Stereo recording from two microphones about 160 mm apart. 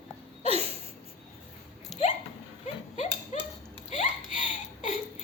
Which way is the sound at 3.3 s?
50° left (ahead or behind).